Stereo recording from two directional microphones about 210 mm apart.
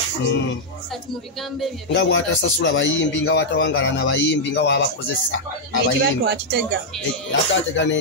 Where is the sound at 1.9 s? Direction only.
65° left (ahead or behind).